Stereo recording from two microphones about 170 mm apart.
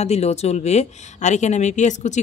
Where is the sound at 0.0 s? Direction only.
40° left (ahead or behind).